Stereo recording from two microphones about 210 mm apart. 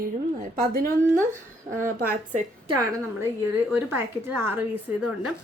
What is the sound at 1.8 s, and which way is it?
Speech, 40° right (ahead or behind).